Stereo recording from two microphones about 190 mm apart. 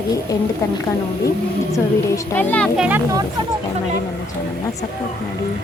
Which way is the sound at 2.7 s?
10° right (ahead or behind).